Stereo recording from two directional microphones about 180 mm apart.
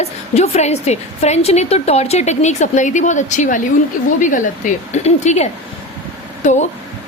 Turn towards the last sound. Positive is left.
turn(degrees=40)  # may be behind; listen again after turning